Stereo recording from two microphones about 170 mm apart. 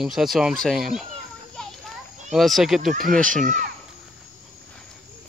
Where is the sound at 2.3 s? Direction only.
Centre (ahead or behind).